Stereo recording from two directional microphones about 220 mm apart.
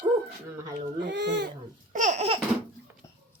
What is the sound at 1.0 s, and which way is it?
Baby cry, 50° right (ahead or behind).